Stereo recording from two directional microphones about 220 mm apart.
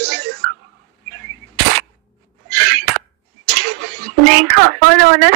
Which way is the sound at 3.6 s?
50° right (ahead or behind).